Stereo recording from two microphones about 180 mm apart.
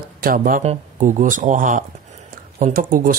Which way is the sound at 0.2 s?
50° right (ahead or behind).